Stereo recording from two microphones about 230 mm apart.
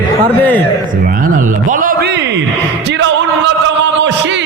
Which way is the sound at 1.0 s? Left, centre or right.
Right.